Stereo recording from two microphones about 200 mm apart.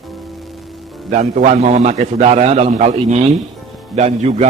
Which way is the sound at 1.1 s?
40° right (ahead or behind).